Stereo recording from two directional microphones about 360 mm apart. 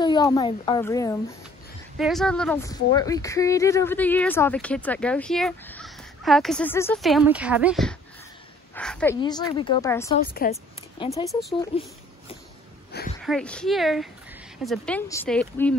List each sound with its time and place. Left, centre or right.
0.0 s speech: centre
10.3 s speech: left
11.2 s speech: centre
13.2 s speech: centre